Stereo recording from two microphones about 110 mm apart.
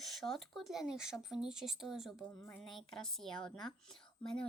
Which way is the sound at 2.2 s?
20° left (ahead or behind).